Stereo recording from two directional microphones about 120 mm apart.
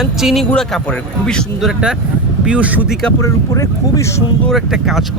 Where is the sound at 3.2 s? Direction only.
25° left (ahead or behind).